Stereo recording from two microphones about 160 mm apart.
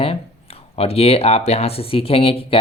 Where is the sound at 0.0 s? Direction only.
35° left (ahead or behind).